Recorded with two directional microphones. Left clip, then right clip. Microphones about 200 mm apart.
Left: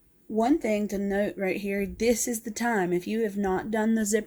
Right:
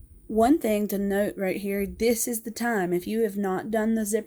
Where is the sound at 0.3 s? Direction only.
35° right (ahead or behind); by 3.9 s 15° right (ahead or behind).